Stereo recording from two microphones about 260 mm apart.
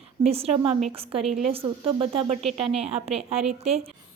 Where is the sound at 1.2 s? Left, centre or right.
Centre.